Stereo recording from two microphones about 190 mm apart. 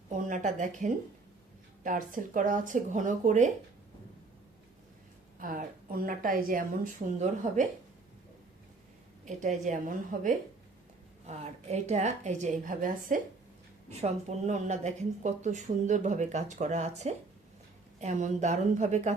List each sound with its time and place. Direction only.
0.3 s speech: 40° right (ahead or behind)
5.4 s speech: 45° right (ahead or behind)
9.2 s speech: 40° right (ahead or behind)